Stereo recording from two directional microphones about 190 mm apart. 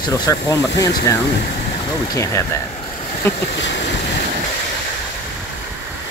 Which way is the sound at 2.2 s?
15° left (ahead or behind).